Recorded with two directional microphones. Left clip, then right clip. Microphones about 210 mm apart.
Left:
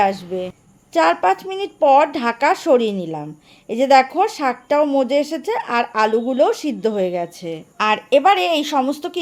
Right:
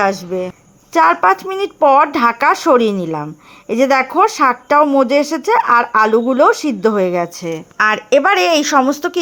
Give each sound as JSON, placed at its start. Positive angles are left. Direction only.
{"t": 0.9, "sound": "speech", "side_deg": -20}